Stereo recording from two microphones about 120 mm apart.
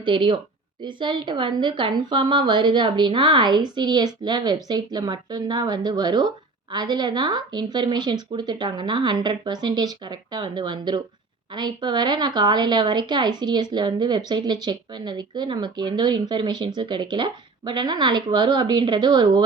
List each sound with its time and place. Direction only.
0.0 s a woman's voice: 45° right (ahead or behind)